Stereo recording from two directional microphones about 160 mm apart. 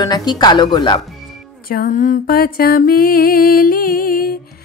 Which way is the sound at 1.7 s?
60° left (ahead or behind).